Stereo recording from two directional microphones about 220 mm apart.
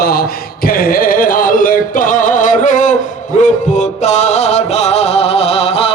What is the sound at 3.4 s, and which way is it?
Music, 35° left (ahead or behind).